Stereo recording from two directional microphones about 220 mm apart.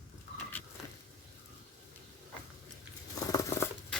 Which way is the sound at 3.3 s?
15° left (ahead or behind).